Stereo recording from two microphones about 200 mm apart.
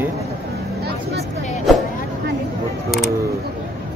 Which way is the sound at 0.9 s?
55° right (ahead or behind).